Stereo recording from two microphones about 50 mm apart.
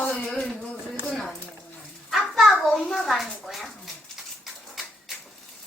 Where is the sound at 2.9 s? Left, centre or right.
Centre.